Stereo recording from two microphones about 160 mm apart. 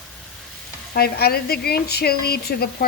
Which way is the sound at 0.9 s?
80° left.